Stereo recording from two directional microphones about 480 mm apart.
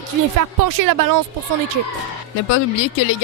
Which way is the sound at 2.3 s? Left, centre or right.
Left.